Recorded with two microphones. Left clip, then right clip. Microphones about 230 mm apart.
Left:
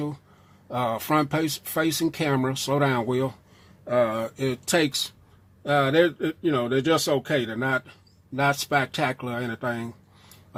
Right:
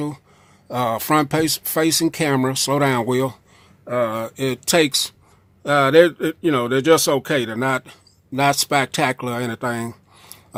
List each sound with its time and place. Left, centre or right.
0.7 s speech: right